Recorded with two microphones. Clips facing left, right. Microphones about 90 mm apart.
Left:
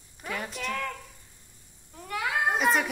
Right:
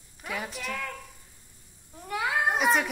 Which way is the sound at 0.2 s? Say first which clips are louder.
Left 1 dB; centre (ahead or behind).